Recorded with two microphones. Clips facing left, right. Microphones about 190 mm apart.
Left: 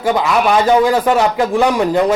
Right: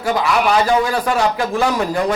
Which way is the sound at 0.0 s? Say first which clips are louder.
Left 3 dB; 25° left (ahead or behind).